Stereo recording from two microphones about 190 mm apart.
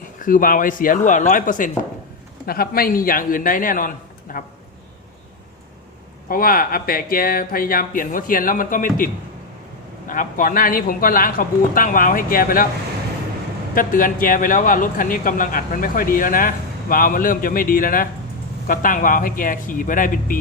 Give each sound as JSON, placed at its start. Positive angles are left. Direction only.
{"t": 0.2, "sound": "a man's voice", "side_deg": 45}
{"t": 6.2, "sound": "a man's voice", "side_deg": 50}
{"t": 10.1, "sound": "a man's voice", "side_deg": 45}
{"t": 13.7, "sound": "a man's voice", "side_deg": 45}